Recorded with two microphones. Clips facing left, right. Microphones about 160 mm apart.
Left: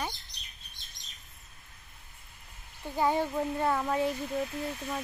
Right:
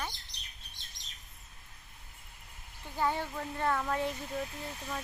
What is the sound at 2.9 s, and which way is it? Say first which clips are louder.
Speech: left 5 dB; 15° left (ahead or behind).